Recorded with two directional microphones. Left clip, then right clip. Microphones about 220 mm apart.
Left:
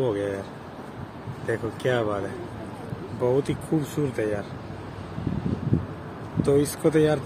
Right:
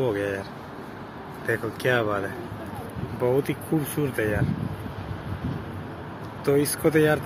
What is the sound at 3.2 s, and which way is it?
Speech, 10° left (ahead or behind).